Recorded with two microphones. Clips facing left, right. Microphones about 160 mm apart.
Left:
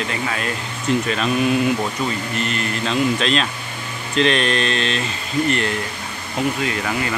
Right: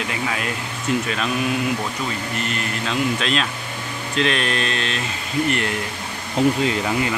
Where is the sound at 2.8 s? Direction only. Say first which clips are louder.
Left 3 dB; 5° right (ahead or behind).